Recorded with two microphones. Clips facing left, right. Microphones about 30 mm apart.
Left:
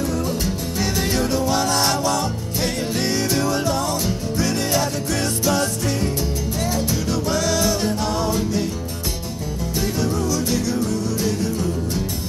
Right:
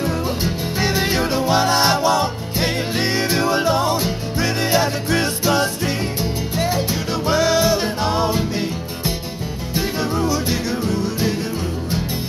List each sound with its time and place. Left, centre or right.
0.0 s music: right